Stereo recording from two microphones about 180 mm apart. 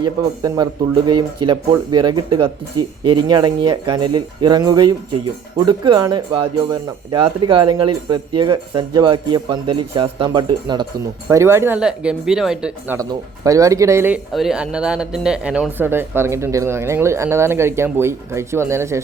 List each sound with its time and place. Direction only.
0.0 s speech: 20° right (ahead or behind); by 13.0 s 5° right (ahead or behind)
13.0 s speech: 20° right (ahead or behind)
14.3 s speech: 5° right (ahead or behind)